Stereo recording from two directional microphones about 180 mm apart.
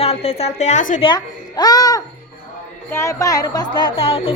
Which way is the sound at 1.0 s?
25° left (ahead or behind).